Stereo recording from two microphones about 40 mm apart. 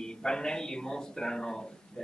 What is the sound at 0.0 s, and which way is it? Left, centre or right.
A man's voice, centre.